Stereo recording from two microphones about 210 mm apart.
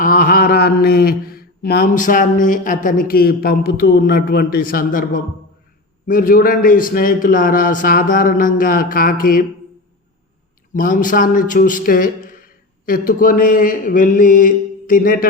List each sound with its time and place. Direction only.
0.0 s mantra: 40° left (ahead or behind)
6.1 s a man's voice: 40° left (ahead or behind)
10.8 s a man's voice: 40° left (ahead or behind)